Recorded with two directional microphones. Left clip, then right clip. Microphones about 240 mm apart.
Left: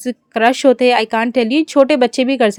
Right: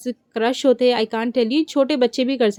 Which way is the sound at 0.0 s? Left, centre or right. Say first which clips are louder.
Left 8 dB; left.